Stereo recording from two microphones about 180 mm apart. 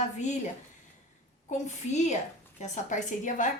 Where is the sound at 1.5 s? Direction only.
40° left (ahead or behind).